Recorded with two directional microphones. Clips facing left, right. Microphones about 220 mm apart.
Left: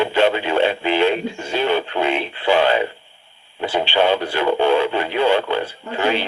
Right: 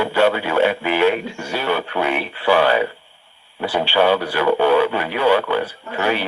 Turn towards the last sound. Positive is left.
turn(degrees=25)  # may be behind; listen again after turning